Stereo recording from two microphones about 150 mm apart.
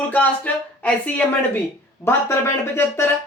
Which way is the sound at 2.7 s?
15° left (ahead or behind).